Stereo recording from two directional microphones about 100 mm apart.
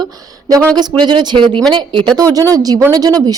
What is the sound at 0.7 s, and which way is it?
Speech, 45° right (ahead or behind).